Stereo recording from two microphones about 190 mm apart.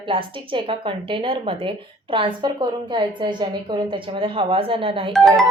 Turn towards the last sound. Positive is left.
turn(degrees=0)  # may be behind; listen again after turning